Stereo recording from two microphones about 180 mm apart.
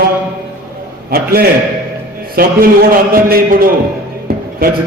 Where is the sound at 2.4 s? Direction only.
55° right (ahead or behind).